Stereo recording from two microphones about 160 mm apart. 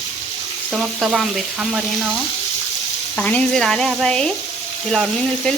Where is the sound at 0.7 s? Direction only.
5° right (ahead or behind).